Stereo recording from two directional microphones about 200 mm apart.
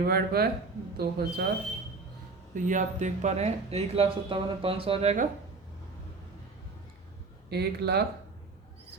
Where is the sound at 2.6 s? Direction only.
40° right (ahead or behind).